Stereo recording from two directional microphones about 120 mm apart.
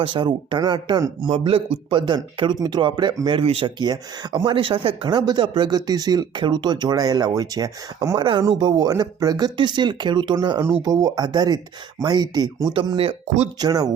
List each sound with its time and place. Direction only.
0.0 s speech: 40° right (ahead or behind)
1.3 s speech: 50° right (ahead or behind)
3.4 s speech: 50° right (ahead or behind)
4.4 s speech: 50° right (ahead or behind); by 8.2 s 30° right (ahead or behind)
8.2 s speech: 40° right (ahead or behind)
13.2 s speech: 70° right (ahead or behind)
13.6 s speech: 35° right (ahead or behind)